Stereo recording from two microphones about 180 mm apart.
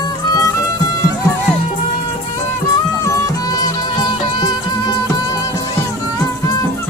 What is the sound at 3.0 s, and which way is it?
Music, 20° left (ahead or behind).